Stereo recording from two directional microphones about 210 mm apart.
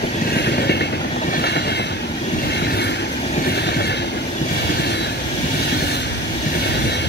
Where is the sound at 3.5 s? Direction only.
50° left (ahead or behind).